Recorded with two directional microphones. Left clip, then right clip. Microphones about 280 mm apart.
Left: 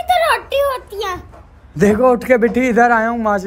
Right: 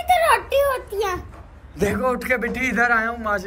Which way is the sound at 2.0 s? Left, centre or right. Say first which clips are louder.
Left 10 dB; centre.